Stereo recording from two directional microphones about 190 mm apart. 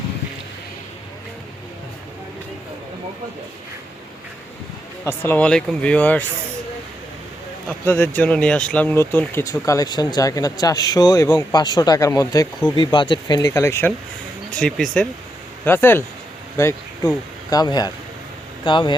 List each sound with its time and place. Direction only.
5.0 s speech: 10° left (ahead or behind)
7.7 s speech: 10° left (ahead or behind); by 18.9 s 25° left (ahead or behind)